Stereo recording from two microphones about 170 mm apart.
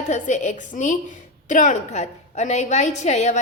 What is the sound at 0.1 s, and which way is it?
A woman's voice, 45° left (ahead or behind).